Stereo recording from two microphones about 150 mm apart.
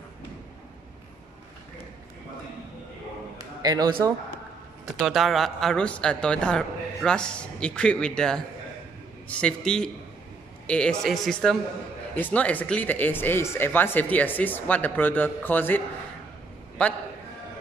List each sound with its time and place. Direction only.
3.3 s a sound: 25° right (ahead or behind)
5.0 s speech: centre (ahead or behind)
16.8 s speech: 10° left (ahead or behind)